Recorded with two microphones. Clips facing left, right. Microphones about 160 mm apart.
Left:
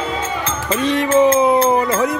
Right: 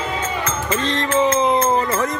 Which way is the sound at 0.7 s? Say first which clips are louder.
Left 6 dB; 10° left (ahead or behind).